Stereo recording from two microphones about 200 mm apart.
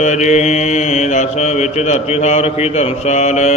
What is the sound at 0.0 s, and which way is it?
Mantra, 35° left (ahead or behind).